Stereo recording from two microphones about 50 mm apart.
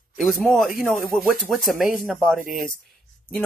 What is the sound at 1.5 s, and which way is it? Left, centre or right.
Speech, centre.